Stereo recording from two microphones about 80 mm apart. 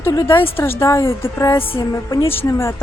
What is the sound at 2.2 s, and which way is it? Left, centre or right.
Speech, left.